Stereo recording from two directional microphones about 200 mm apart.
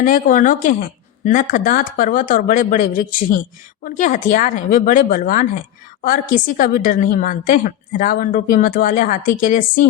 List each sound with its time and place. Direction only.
0.0 s a woman's voice: 40° left (ahead or behind)